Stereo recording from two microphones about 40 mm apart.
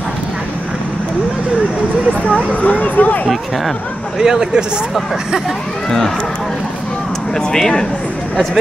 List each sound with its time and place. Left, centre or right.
2.6 s speech: left
4.2 s speech: centre
5.9 s speech: centre
7.3 s speech: centre